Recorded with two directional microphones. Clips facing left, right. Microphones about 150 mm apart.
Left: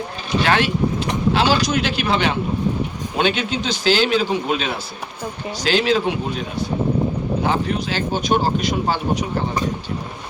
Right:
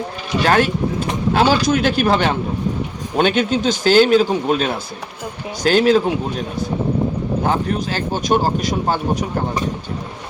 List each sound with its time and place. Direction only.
0.4 s speech: 45° right (ahead or behind)
7.4 s speech: 45° right (ahead or behind)